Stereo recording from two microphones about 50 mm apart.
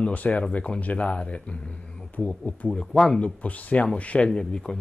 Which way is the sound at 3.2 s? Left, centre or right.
Left.